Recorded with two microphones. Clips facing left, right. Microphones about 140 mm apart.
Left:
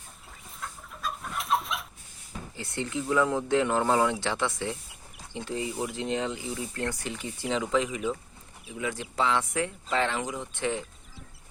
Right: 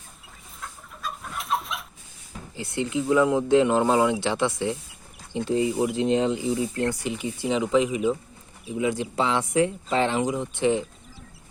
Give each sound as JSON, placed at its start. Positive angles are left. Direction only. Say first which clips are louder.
{"t": 0.6, "sound": "chicken", "louder": "even", "side_deg": 0}
{"t": 2.6, "sound": "speech", "louder": "right 6 dB", "side_deg": -15}